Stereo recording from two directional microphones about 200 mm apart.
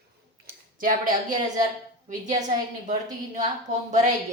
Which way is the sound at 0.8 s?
45° right (ahead or behind).